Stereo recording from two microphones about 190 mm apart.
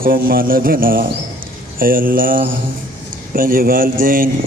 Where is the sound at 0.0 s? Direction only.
50° right (ahead or behind).